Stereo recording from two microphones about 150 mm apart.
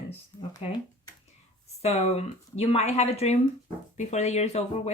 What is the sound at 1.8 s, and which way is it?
Speech, 45° left (ahead or behind).